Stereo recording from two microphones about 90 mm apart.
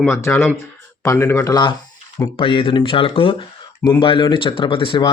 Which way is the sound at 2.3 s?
70° left (ahead or behind).